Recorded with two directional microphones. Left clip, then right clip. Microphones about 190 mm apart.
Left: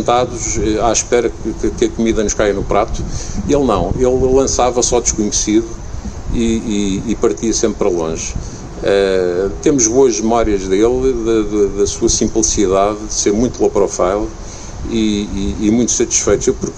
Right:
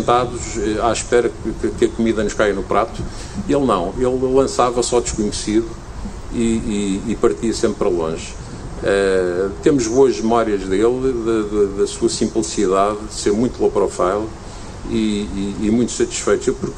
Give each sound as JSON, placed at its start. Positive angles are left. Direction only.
{"t": 0.0, "sound": "a man's voice", "side_deg": 45}